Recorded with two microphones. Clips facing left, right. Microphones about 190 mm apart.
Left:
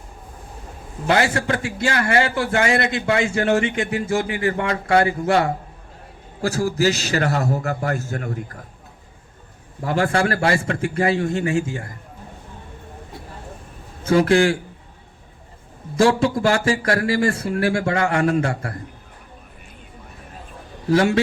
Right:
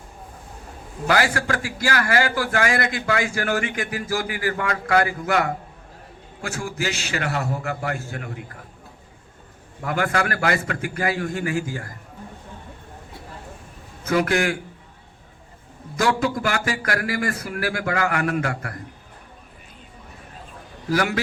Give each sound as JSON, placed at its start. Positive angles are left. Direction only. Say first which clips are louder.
{"t": 1.0, "sound": "a man's voice", "louder": "left 2 dB", "side_deg": 25}
{"t": 9.8, "sound": "a man's voice", "louder": "left 4 dB", "side_deg": 30}
{"t": 14.0, "sound": "a man's voice", "louder": "left 5 dB", "side_deg": 30}
{"t": 16.0, "sound": "a man's voice", "louder": "left 5 dB", "side_deg": 30}
{"t": 20.9, "sound": "a man's voice", "louder": "left 5 dB", "side_deg": 25}